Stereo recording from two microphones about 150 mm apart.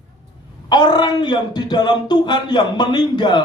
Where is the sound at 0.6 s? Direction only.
30° left (ahead or behind).